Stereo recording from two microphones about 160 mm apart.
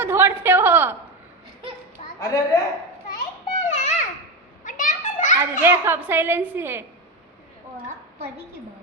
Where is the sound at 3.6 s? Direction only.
45° left (ahead or behind).